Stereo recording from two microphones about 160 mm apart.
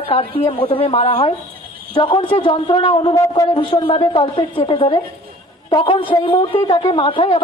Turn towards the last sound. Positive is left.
turn(degrees=35)  # may be behind; listen again after turning